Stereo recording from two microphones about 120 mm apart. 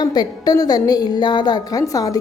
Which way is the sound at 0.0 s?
35° left (ahead or behind).